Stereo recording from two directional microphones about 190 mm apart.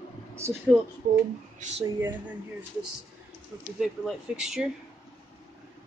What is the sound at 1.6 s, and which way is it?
Speech, 35° right (ahead or behind).